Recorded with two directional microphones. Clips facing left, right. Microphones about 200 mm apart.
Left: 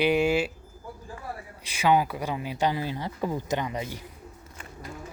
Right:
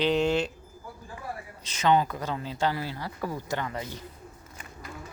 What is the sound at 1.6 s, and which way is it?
Speech, 10° left (ahead or behind).